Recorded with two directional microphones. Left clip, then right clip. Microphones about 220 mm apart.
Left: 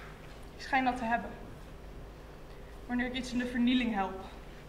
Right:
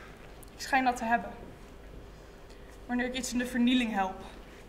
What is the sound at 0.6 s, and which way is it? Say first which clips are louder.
Speech: right 3 dB; 30° right (ahead or behind).